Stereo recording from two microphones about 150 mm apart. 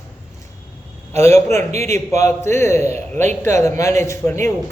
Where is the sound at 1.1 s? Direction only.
20° left (ahead or behind).